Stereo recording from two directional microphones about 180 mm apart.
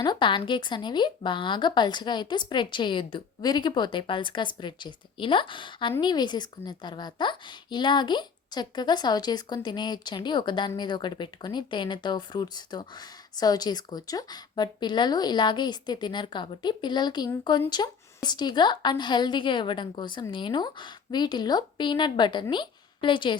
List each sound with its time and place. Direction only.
0.0 s speech: 25° left (ahead or behind)